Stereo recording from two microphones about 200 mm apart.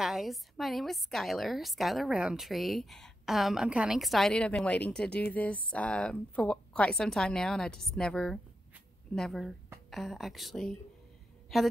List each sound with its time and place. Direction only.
0.0 s a woman's voice: centre (ahead or behind)